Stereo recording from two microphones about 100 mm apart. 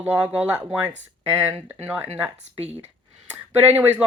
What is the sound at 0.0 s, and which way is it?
Speech, 15° right (ahead or behind).